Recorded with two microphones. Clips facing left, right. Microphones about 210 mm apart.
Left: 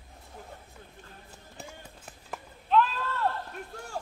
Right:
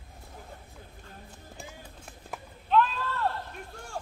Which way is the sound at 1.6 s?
Centre (ahead or behind).